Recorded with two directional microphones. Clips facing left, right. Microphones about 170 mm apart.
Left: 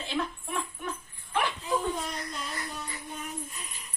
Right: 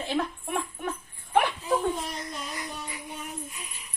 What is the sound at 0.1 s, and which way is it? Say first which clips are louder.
Jingle bell: right 3 dB; 50° right (ahead or behind).